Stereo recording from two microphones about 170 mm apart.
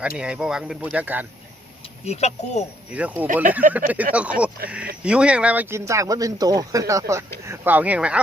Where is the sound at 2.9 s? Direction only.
10° right (ahead or behind).